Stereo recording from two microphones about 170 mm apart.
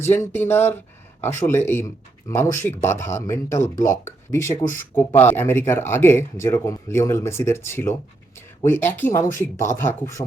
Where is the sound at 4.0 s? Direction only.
15° left (ahead or behind).